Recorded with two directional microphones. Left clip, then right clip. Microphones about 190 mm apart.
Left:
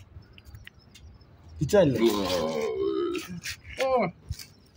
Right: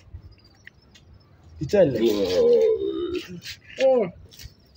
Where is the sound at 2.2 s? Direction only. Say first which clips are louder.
Right 10 dB; centre (ahead or behind).